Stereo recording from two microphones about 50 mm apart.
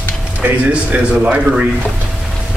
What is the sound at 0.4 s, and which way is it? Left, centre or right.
Speech, right.